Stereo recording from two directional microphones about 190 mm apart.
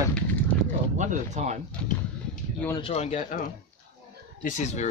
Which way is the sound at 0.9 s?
40° right (ahead or behind).